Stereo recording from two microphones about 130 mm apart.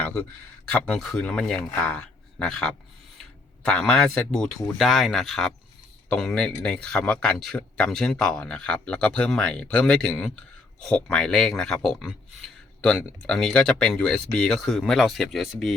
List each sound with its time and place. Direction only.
0.7 s speech: 5° left (ahead or behind)